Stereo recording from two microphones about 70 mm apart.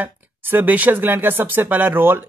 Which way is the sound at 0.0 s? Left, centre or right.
Right.